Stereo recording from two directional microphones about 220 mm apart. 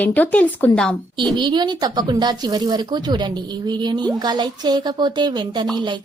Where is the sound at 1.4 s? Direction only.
20° right (ahead or behind).